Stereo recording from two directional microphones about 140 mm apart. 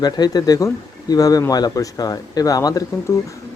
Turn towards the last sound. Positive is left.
turn(degrees=25)  # may be behind; listen again after turning